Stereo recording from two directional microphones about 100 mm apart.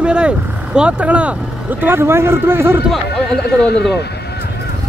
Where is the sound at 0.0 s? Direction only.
10° right (ahead or behind).